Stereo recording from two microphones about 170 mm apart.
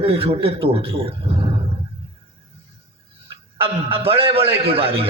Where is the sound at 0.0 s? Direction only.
35° right (ahead or behind).